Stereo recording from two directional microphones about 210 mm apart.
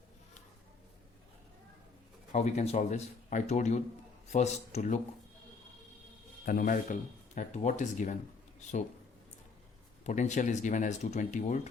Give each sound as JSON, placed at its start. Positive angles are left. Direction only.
{"t": 2.3, "sound": "speech", "side_deg": 35}
{"t": 6.4, "sound": "speech", "side_deg": 40}
{"t": 10.1, "sound": "speech", "side_deg": 35}